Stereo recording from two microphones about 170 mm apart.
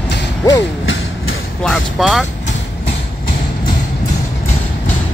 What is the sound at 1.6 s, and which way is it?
Vehicle, centre (ahead or behind).